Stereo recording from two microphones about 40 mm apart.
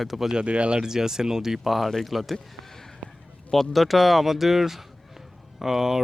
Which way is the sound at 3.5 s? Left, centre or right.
Centre.